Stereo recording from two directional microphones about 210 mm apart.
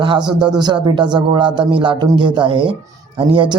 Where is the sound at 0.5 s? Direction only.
20° right (ahead or behind).